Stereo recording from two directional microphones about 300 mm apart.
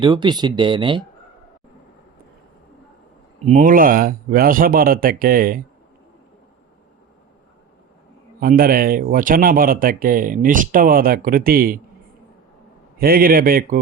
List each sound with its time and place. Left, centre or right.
0.0 s speech: centre
3.4 s speech: right
8.4 s speech: right
13.0 s speech: right